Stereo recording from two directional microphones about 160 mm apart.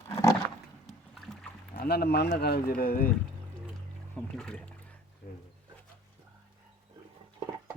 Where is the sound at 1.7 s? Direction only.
70° left (ahead or behind); by 2.5 s 85° left.